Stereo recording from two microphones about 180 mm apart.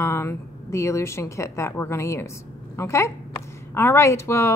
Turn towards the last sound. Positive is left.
turn(degrees=15)  # may be behind; listen again after turning